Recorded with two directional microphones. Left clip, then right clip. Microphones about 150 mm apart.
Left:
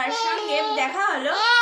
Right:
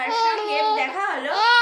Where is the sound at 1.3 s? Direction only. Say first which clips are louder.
Right 3 dB; 20° right (ahead or behind).